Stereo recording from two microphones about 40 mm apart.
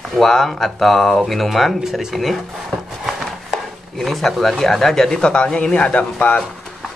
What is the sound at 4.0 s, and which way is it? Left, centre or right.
Speech, centre.